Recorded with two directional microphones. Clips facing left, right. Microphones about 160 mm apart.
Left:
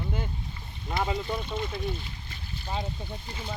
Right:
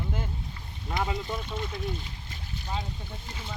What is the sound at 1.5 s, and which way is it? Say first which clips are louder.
Speech: left 2 dB; 10° left (ahead or behind).